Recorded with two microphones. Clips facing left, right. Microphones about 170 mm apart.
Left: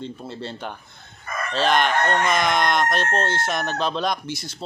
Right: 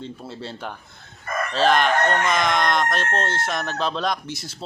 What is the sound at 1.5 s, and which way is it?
Speech, centre (ahead or behind).